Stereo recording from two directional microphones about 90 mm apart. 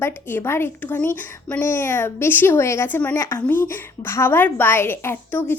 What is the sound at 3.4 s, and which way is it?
A woman's voice, 20° left (ahead or behind).